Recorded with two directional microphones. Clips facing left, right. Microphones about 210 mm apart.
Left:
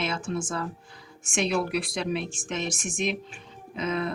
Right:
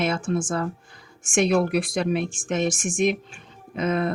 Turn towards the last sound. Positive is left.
turn(degrees=-50)  # may be behind; listen again after turning